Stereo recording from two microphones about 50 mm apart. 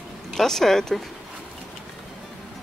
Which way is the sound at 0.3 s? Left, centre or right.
Centre.